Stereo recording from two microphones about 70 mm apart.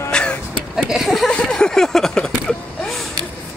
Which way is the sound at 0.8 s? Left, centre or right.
Centre.